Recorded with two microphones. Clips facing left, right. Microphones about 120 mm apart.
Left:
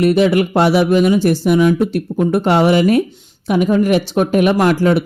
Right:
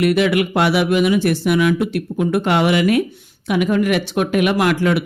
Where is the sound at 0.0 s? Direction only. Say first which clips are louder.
Left 3 dB; 35° left (ahead or behind).